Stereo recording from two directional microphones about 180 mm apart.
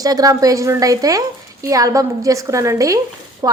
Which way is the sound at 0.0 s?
20° right (ahead or behind).